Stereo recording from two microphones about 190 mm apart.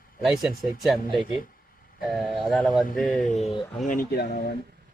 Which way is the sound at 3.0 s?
40° left (ahead or behind).